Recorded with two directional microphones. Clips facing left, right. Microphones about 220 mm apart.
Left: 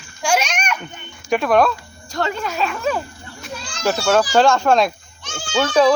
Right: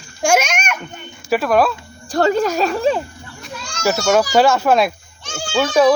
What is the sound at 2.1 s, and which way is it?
Speech, 40° right (ahead or behind).